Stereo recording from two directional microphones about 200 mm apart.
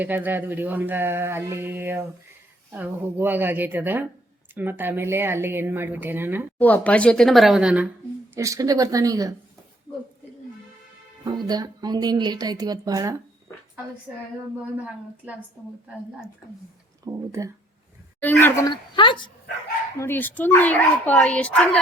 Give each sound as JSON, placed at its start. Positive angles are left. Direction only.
{"t": 0.0, "sound": "speech", "side_deg": -10}
{"t": 6.6, "sound": "speech", "side_deg": 10}
{"t": 8.4, "sound": "speech", "side_deg": -15}
{"t": 11.3, "sound": "speech", "side_deg": -20}
{"t": 17.1, "sound": "speech", "side_deg": -15}
{"t": 18.7, "sound": "a woman's voice", "side_deg": 25}
{"t": 20.0, "sound": "speech", "side_deg": 10}